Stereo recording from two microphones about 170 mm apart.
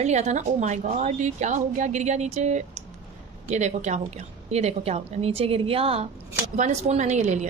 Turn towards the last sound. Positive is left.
turn(degrees=-45)  # may be behind; listen again after turning